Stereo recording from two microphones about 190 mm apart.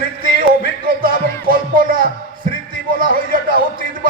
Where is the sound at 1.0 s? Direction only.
50° right (ahead or behind).